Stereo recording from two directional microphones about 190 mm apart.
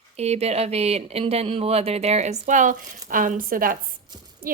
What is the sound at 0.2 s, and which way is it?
A woman's voice, 35° right (ahead or behind).